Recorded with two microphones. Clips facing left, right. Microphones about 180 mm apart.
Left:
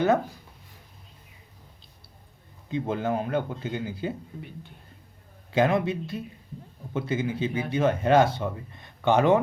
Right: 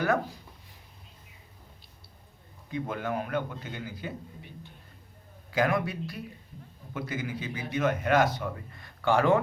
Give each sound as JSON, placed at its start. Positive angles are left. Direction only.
{"t": 2.6, "sound": "speech", "side_deg": 25}
{"t": 5.5, "sound": "speech", "side_deg": 25}